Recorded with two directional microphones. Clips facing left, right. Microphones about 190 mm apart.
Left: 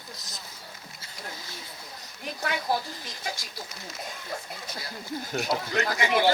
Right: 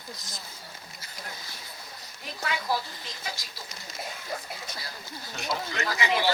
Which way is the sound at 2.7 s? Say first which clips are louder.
Left 2 dB; 50° left (ahead or behind).